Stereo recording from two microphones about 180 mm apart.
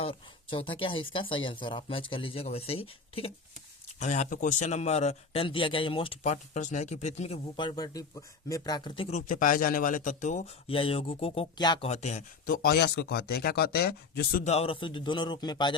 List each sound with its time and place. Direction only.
0.0 s a man's voice: 30° left (ahead or behind)
11.9 s a man's voice: 40° left (ahead or behind)
12.5 s speech: 60° left (ahead or behind)
14.4 s speech: 35° left (ahead or behind)